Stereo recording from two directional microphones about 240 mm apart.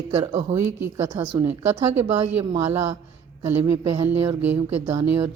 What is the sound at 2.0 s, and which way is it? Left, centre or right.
Speech, right.